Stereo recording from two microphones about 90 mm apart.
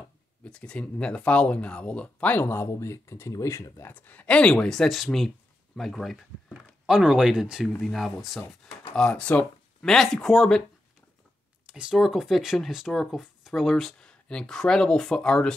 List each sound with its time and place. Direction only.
0.4 s speech: 10° left (ahead or behind)
2.4 s speech: 30° left (ahead or behind)
3.8 s speech: 20° left (ahead or behind); by 8.4 s centre (ahead or behind)
8.9 s speech: 10° left (ahead or behind)
9.8 s speech: 5° left (ahead or behind)
11.6 s speech: 10° right (ahead or behind); by 15.5 s 10° left (ahead or behind)